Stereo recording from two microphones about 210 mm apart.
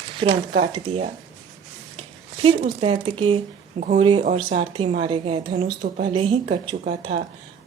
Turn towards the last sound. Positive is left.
turn(degrees=-40)  # may be behind; listen again after turning